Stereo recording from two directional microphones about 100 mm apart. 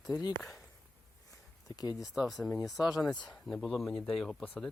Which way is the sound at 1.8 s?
40° left (ahead or behind).